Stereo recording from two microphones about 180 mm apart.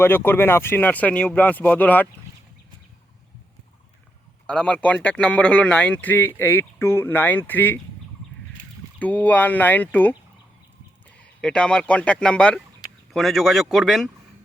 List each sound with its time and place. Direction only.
0.0 s speech: 10° left (ahead or behind)
4.4 s speech: 5° left (ahead or behind)
9.0 s speech: 10° left (ahead or behind)
11.2 s speech: 5° left (ahead or behind)